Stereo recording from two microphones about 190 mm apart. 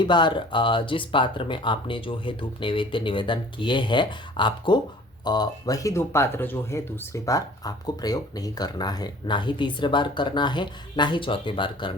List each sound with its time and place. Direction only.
0.0 s speech: 25° left (ahead or behind)